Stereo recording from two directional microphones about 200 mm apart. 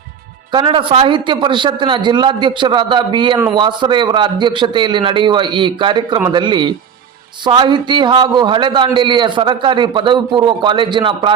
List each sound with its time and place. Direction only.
0.5 s a man's voice: 25° right (ahead or behind)